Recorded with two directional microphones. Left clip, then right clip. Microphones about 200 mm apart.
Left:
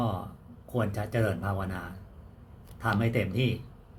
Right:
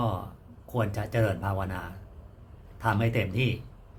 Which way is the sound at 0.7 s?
15° right (ahead or behind).